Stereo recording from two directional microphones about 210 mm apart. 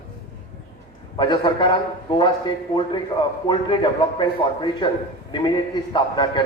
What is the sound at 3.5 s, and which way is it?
A man's voice, 20° left (ahead or behind).